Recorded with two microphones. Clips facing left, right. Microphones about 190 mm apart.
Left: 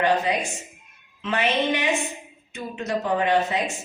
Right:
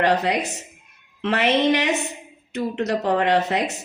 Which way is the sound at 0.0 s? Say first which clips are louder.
Right 2 dB; 75° right (ahead or behind).